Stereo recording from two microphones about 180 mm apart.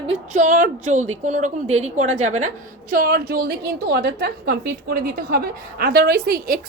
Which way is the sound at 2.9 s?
55° right (ahead or behind).